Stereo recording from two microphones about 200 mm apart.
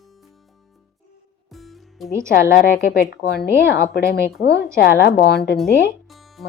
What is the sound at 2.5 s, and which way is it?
Speech, 45° left (ahead or behind).